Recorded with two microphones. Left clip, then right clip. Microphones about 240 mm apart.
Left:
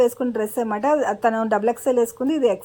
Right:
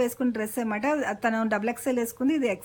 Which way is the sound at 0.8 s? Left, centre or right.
Centre.